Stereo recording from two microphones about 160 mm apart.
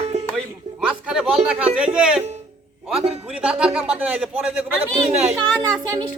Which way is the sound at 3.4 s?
5° right (ahead or behind).